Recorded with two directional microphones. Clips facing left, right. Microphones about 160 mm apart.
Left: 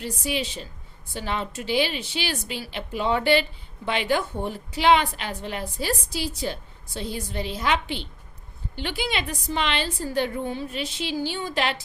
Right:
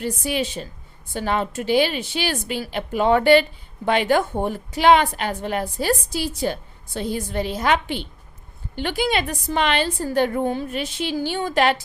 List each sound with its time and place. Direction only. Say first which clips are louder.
0.0 s a woman's voice: right 4 dB; 50° right (ahead or behind)